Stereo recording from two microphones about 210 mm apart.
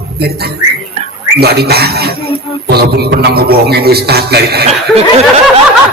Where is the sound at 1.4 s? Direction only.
50° right (ahead or behind).